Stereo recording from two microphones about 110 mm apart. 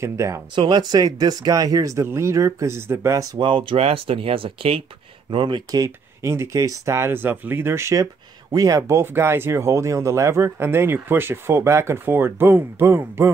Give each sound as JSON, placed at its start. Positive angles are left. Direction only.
{"t": 0.0, "sound": "speech", "side_deg": -25}
{"t": 0.6, "sound": "speech", "side_deg": -45}
{"t": 3.3, "sound": "speech", "side_deg": -50}
{"t": 3.7, "sound": "speech", "side_deg": -65}
{"t": 5.9, "sound": "speech", "side_deg": -25}
{"t": 8.0, "sound": "speech", "side_deg": -35}